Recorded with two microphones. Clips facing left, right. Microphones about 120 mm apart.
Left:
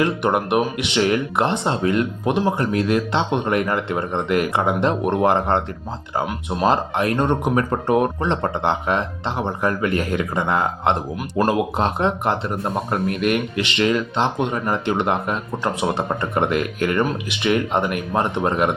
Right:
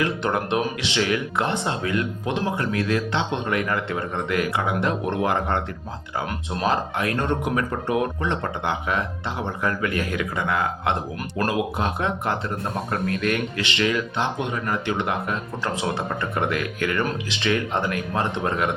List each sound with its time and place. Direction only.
0.0 s speech: 20° left (ahead or behind)